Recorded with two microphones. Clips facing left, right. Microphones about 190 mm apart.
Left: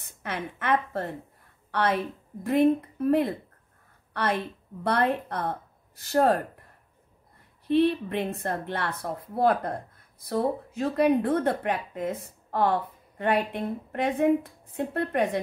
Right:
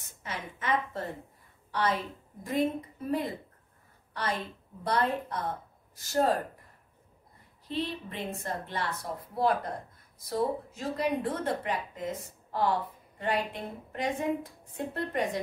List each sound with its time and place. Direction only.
0.2 s a woman's voice: 60° left (ahead or behind)
7.6 s a woman's voice: 60° left (ahead or behind)
12.4 s a sound: 60° left (ahead or behind)
13.2 s a woman's voice: 60° left (ahead or behind)